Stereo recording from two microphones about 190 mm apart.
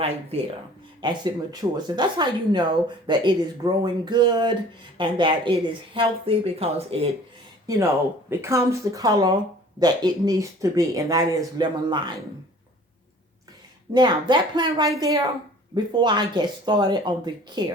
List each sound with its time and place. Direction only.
0.0 s speech: 30° right (ahead or behind)
8.3 s speech: 15° right (ahead or behind)
13.9 s speech: 25° right (ahead or behind)